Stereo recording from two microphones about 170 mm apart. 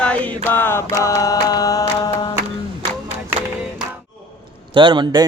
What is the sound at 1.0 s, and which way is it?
Chant, 20° left (ahead or behind).